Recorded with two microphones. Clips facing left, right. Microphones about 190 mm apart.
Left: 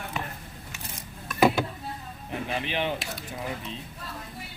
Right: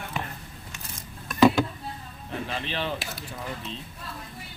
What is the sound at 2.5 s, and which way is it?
Speech, 15° left (ahead or behind).